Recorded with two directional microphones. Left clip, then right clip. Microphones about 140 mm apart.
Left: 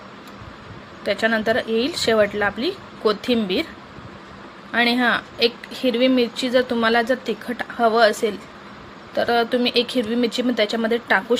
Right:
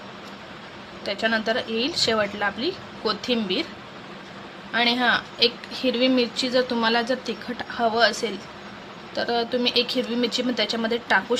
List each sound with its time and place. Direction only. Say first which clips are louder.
1.0 s speech: left 4 dB; 35° left (ahead or behind)
4.7 s speech: left 2 dB; 35° left (ahead or behind)